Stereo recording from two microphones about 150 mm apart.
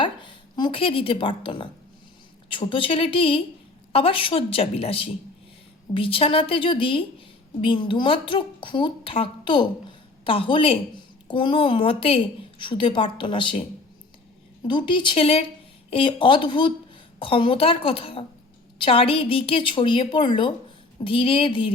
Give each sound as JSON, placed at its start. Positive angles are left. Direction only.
{"t": 0.0, "sound": "a woman's voice", "side_deg": 35}